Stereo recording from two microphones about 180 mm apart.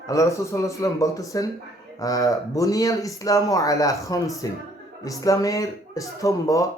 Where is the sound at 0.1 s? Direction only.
15° left (ahead or behind).